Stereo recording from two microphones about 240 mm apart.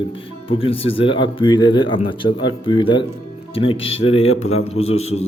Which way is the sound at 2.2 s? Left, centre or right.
Left.